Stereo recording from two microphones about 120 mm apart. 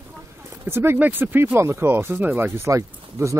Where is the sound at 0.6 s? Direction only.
20° right (ahead or behind).